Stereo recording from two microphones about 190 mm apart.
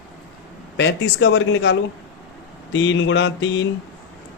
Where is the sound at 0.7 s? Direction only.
70° left (ahead or behind).